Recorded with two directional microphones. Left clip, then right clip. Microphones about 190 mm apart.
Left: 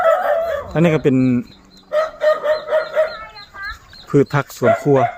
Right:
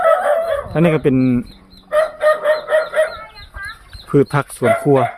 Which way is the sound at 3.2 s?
15° right (ahead or behind).